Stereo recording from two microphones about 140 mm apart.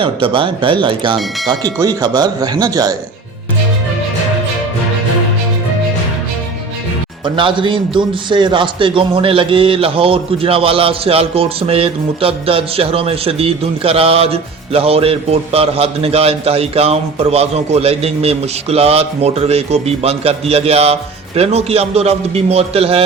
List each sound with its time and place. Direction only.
0.0 s speech: 40° right (ahead or behind)
7.3 s a man's voice: 35° right (ahead or behind)